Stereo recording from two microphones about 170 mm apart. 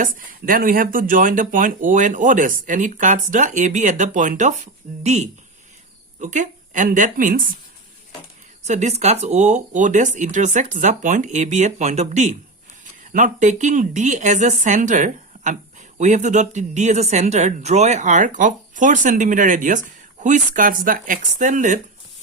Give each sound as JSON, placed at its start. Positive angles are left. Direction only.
{"t": 0.0, "sound": "a woman's voice", "side_deg": -55}
{"t": 8.6, "sound": "speech", "side_deg": -45}